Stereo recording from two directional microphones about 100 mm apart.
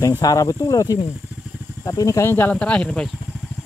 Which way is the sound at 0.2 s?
35° left (ahead or behind).